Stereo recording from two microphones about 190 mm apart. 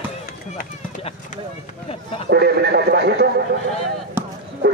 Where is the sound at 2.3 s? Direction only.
60° right (ahead or behind).